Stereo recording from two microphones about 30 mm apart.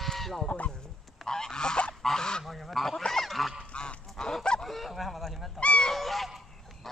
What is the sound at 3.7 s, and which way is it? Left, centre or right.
Goose, left.